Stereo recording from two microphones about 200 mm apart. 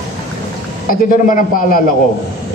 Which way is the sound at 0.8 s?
45° left (ahead or behind).